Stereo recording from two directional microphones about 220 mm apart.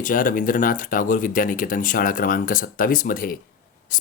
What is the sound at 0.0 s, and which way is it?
Speech, 40° left (ahead or behind).